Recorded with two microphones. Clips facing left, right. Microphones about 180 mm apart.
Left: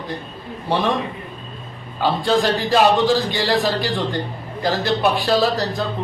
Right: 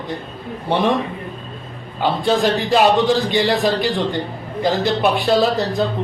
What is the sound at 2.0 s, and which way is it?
A man's voice, 20° right (ahead or behind).